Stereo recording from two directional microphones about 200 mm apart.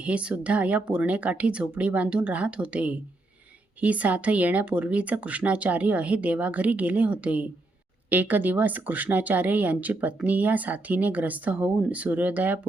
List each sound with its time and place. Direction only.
0.0 s speech: 5° right (ahead or behind)